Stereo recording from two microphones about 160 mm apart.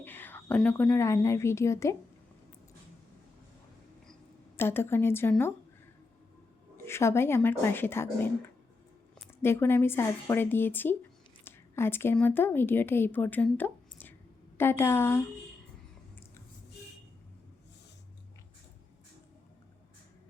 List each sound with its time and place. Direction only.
0.0 s a woman's voice: 10° left (ahead or behind)
4.5 s speech: 15° left (ahead or behind)
6.8 s speech: 15° left (ahead or behind)
9.4 s a woman's voice: 15° left (ahead or behind)